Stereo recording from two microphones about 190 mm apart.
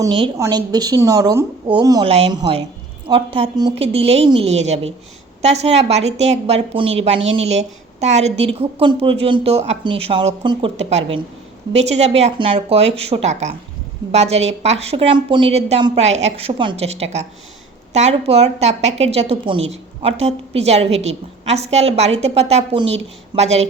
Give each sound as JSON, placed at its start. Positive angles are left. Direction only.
{"t": 0.0, "sound": "a woman's voice", "side_deg": -25}
{"t": 2.0, "sound": "a woman's voice", "side_deg": -30}